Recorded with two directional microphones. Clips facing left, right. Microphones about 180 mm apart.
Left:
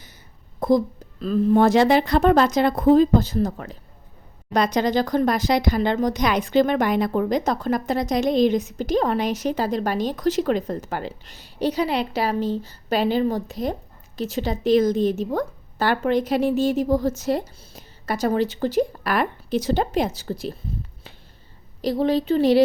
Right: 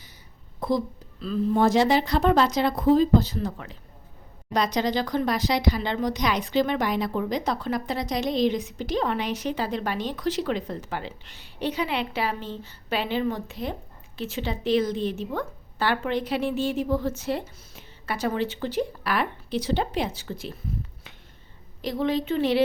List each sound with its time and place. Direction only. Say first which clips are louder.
0.6 s a sound: left 7 dB; 45° left (ahead or behind)
1.2 s a woman's voice: left 5 dB; 55° left (ahead or behind); by 20.6 s 35° left (ahead or behind)
21.8 s a woman's voice: left 5 dB; 35° left (ahead or behind)